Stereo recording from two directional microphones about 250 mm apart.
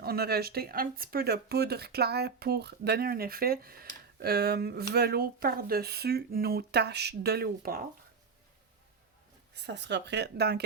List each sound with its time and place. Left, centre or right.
0.0 s speech: right
9.6 s speech: right